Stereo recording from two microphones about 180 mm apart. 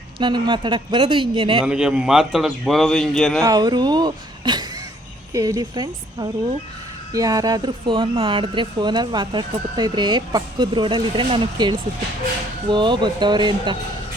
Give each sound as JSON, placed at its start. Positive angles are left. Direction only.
{"t": 0.2, "sound": "speech", "side_deg": -25}
{"t": 1.6, "sound": "a man's voice", "side_deg": -5}
{"t": 3.4, "sound": "speech", "side_deg": -20}